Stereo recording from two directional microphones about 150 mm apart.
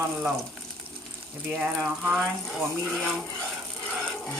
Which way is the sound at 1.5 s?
5° right (ahead or behind).